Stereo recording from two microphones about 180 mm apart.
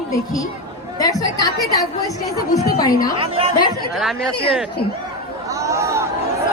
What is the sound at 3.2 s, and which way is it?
Speech, 30° right (ahead or behind).